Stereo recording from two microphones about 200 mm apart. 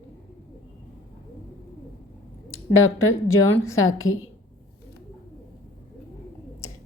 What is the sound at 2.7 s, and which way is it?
Speech, 90° left.